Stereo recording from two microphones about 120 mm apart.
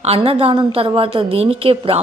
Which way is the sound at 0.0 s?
55° right (ahead or behind).